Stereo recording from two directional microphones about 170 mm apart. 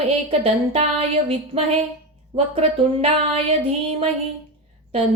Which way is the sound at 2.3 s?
35° right (ahead or behind).